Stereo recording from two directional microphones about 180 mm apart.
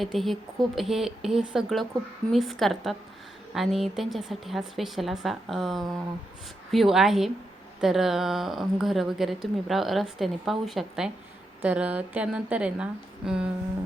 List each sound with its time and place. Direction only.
0.0 s speech: centre (ahead or behind)